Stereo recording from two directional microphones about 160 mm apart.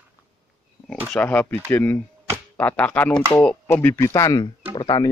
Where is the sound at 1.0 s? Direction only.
10° left (ahead or behind).